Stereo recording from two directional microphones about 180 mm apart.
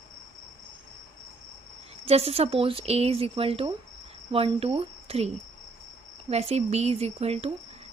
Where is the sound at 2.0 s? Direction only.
35° right (ahead or behind).